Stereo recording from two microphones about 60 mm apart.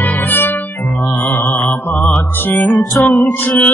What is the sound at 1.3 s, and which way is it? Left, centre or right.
Mantra, left.